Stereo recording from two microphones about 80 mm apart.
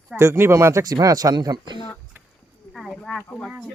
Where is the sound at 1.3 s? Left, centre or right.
Right.